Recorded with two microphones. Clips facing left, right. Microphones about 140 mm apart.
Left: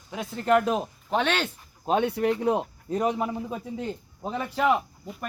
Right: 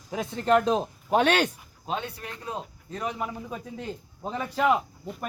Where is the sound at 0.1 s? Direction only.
Centre (ahead or behind).